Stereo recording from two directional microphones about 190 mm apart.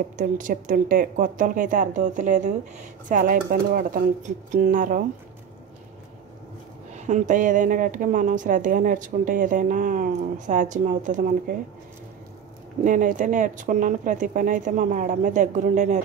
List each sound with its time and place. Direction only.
0.2 s speech: 45° right (ahead or behind)
6.9 s speech: 40° right (ahead or behind)
12.8 s speech: 45° right (ahead or behind)